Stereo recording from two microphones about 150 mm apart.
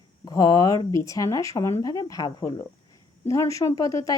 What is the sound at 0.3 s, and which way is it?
Speech, 25° left (ahead or behind).